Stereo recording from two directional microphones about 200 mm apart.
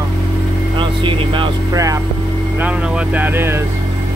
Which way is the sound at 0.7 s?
25° right (ahead or behind).